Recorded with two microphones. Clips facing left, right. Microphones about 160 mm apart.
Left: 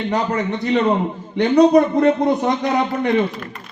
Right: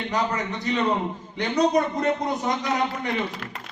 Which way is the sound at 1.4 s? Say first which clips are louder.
Left 9 dB; 60° left (ahead or behind).